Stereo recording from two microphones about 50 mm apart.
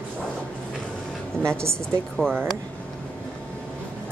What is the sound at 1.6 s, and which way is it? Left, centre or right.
Speech, right.